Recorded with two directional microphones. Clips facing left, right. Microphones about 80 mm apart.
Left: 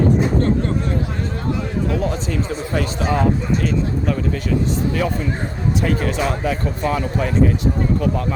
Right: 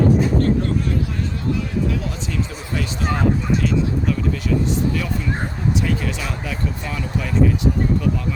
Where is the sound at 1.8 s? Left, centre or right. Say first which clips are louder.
Left 4 dB; left.